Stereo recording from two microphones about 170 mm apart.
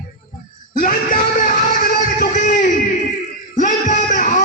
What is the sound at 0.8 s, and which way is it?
Music, 50° left (ahead or behind).